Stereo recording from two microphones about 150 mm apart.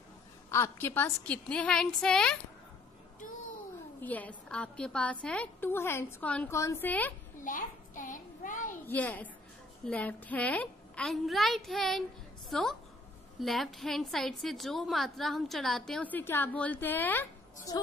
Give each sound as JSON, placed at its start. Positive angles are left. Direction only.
{"t": 0.5, "sound": "a woman's voice", "side_deg": 15}
{"t": 4.0, "sound": "a woman's voice", "side_deg": 10}
{"t": 7.3, "sound": "a sound", "side_deg": 60}
{"t": 8.8, "sound": "a woman's voice", "side_deg": 10}